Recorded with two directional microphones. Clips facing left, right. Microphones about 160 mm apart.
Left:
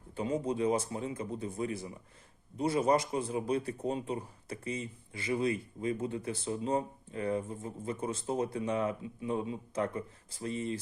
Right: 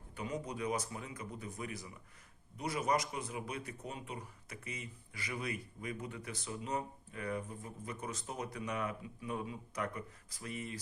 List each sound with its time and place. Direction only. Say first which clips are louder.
0.2 s a man's voice: left 8 dB; 25° left (ahead or behind)